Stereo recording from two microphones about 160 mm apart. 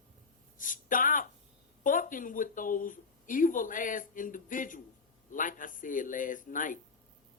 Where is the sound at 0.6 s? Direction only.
55° left (ahead or behind).